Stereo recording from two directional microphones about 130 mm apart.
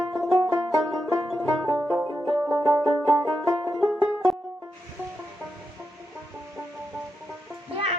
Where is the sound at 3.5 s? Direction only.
20° right (ahead or behind).